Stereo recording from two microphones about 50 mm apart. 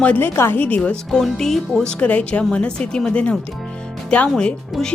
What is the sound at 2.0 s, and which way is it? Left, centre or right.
Speech, left.